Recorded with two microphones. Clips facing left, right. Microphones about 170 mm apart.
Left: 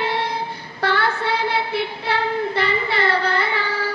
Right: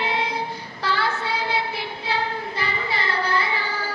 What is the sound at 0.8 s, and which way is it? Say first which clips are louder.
Child singing: left 4 dB; 60° left (ahead or behind).